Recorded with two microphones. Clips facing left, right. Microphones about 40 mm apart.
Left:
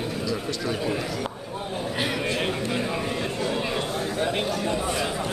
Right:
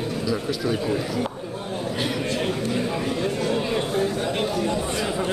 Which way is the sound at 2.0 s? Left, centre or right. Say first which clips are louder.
Even; centre.